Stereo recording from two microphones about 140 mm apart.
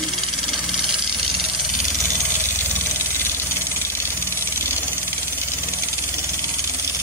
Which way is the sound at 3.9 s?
15° left (ahead or behind).